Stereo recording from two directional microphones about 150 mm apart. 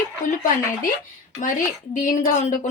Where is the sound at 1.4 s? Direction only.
60° left (ahead or behind).